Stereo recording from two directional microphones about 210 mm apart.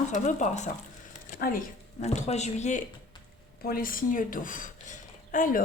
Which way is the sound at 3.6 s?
45° left (ahead or behind).